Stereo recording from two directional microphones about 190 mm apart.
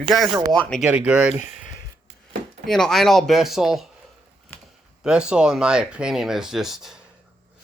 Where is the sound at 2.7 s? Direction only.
Centre (ahead or behind).